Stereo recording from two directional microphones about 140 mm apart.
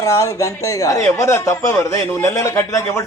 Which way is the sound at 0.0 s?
20° left (ahead or behind).